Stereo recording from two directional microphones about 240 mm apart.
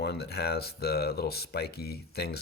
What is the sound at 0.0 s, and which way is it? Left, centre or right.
Speech, left.